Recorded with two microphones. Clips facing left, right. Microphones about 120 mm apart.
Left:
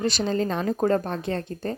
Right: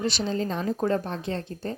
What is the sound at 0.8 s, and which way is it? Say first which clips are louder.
Speech: left 4 dB; 50° left (ahead or behind).